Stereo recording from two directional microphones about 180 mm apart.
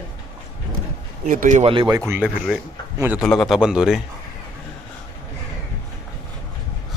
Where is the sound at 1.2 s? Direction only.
45° right (ahead or behind).